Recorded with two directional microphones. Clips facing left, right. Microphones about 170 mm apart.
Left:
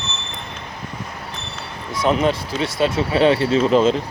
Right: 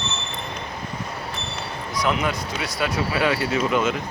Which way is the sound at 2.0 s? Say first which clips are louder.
Left 6 dB; 30° left (ahead or behind).